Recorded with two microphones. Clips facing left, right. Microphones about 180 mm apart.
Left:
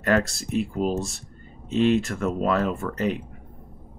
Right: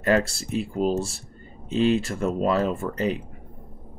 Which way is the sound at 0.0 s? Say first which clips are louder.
Right 1 dB; 30° right (ahead or behind).